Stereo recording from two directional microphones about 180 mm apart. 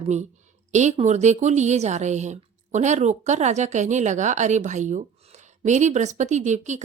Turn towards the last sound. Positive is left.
turn(degrees=-40)  # may be behind; listen again after turning